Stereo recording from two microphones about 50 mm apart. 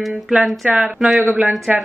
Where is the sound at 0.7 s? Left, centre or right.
Right.